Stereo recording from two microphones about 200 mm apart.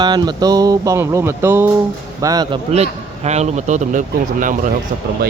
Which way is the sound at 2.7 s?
35° right (ahead or behind).